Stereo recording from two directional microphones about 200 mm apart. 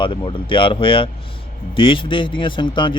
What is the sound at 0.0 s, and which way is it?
Speech, 25° left (ahead or behind).